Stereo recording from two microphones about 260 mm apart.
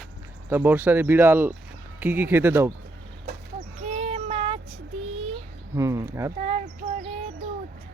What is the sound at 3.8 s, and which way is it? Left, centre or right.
Child singing, right.